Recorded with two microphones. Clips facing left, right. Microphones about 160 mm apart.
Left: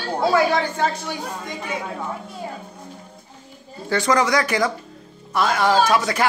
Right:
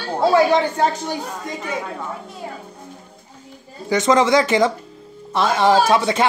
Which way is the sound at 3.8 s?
20° right (ahead or behind).